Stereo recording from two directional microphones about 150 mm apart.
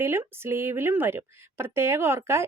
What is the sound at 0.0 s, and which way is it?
Speech, 15° right (ahead or behind).